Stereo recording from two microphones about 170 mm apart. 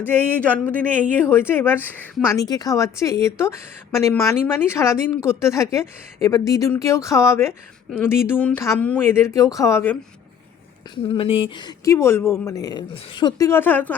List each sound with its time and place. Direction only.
0.0 s a woman's voice: 10° left (ahead or behind)
10.9 s speech: 30° left (ahead or behind); by 13.9 s 10° left (ahead or behind)